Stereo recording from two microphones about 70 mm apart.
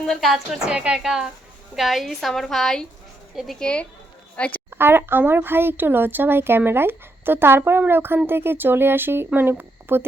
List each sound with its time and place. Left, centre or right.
0.0 s a woman's voice: centre
0.7 s a woman's voice: centre
4.4 s a woman's voice: centre
4.7 s speech: right